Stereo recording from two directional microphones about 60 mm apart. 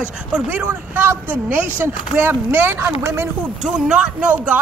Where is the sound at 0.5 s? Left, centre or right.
Right.